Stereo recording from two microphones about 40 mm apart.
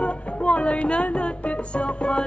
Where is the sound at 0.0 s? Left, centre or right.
Left.